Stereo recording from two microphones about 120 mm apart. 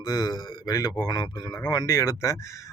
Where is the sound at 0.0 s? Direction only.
35° left (ahead or behind).